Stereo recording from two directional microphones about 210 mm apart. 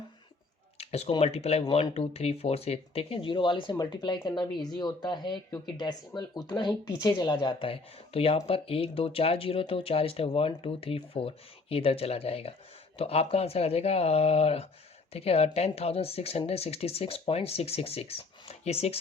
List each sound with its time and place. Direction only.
0.8 s speech: 30° left (ahead or behind)